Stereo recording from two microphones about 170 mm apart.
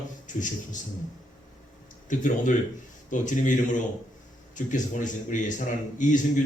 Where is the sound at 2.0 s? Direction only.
45° left (ahead or behind).